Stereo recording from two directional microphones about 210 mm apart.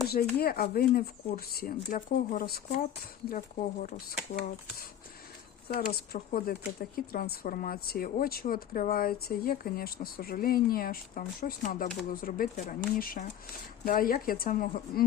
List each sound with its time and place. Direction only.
0.1 s speech: 45° left (ahead or behind)
5.6 s speech: 50° left (ahead or behind)